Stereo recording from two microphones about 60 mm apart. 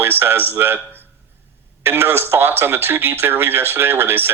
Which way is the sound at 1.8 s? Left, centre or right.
Right.